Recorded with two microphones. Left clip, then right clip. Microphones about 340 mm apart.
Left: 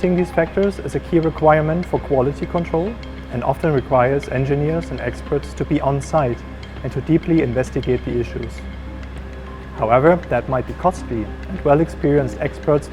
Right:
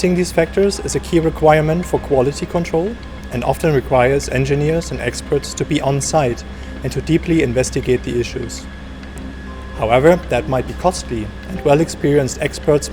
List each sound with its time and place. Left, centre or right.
0.2 s speech: left
9.8 s speech: left